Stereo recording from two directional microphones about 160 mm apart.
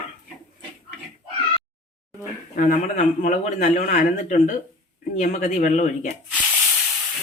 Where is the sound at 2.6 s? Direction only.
50° left (ahead or behind).